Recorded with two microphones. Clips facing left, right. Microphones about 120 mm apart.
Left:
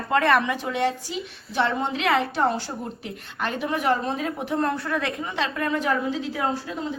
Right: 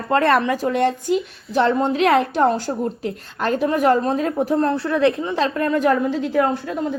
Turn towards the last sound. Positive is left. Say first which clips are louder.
# right 5 dB
turn(degrees=-55)  # may be behind; listen again after turning